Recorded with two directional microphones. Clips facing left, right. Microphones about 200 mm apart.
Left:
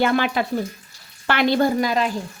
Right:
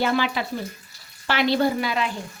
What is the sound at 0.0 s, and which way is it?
Speech, 55° left (ahead or behind).